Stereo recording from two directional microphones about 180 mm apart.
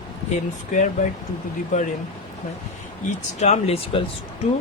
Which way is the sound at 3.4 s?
35° left (ahead or behind).